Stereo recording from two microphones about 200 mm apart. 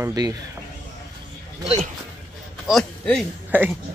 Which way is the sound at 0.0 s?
20° right (ahead or behind).